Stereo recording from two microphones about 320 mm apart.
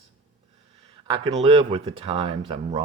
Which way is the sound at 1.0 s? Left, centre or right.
Centre.